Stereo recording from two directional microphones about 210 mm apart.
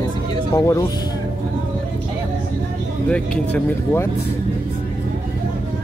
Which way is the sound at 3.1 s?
5° left (ahead or behind).